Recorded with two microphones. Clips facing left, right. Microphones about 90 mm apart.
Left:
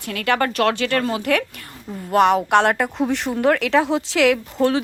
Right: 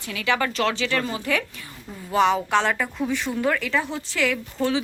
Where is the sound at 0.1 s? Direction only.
55° left (ahead or behind); by 4.4 s 80° left.